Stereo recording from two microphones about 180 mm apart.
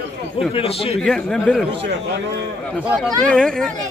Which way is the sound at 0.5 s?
30° left (ahead or behind).